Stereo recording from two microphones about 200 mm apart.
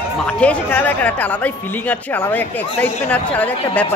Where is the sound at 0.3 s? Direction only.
5° left (ahead or behind).